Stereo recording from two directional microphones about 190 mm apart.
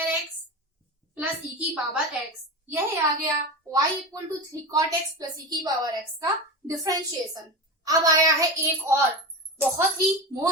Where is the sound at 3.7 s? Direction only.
20° right (ahead or behind).